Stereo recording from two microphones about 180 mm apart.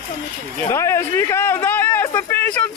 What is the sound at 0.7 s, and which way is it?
Speech, 15° left (ahead or behind).